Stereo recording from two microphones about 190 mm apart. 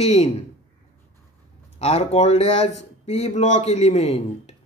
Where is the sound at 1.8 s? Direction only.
30° left (ahead or behind).